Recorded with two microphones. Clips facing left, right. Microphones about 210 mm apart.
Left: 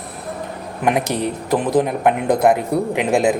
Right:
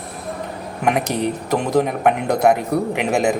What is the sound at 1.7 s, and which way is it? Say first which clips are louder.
Speech: even; 5° left (ahead or behind).